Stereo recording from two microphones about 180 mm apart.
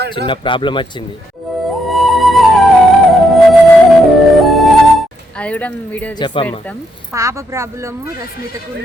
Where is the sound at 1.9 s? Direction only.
Centre (ahead or behind).